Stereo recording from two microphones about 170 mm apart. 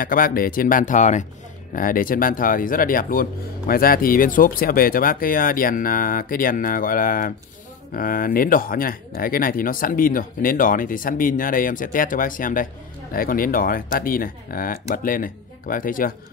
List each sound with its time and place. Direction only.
0.0 s speech: 55° left (ahead or behind)